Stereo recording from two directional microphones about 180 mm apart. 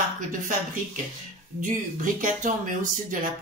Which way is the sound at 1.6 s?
45° right (ahead or behind).